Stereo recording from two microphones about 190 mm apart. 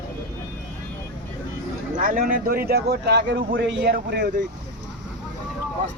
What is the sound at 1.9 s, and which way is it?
Speech, 45° right (ahead or behind).